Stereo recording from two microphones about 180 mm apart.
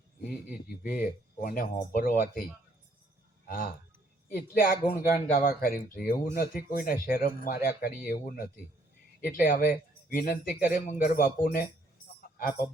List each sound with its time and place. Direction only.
0.2 s speech: 55° left (ahead or behind)
3.4 s speech: 55° left (ahead or behind)